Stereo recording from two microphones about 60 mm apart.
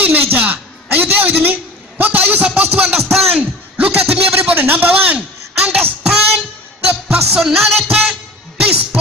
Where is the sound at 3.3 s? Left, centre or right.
Right.